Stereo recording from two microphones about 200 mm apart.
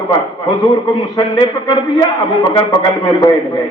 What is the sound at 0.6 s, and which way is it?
A man's voice, 20° left (ahead or behind).